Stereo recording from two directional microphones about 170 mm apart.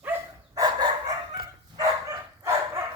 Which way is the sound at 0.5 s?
25° right (ahead or behind).